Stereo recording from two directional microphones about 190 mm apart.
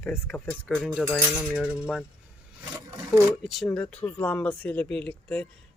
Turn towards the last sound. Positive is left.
turn(degrees=5)  # may be behind; listen again after turning